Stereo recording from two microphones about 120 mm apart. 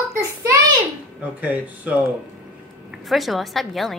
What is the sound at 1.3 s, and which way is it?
Speech, 15° right (ahead or behind).